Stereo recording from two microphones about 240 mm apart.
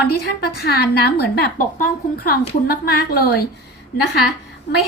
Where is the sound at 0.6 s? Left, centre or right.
Left.